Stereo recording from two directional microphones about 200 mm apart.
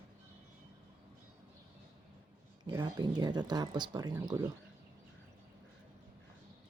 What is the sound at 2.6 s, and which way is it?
Speech, 20° right (ahead or behind).